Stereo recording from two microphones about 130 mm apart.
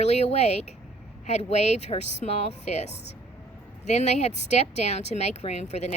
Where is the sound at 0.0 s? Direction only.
60° left (ahead or behind).